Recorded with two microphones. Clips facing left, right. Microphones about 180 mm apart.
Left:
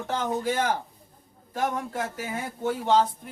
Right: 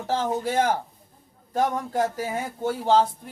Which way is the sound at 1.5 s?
35° right (ahead or behind).